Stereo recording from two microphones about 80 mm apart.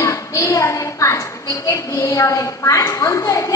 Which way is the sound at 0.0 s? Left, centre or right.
Left.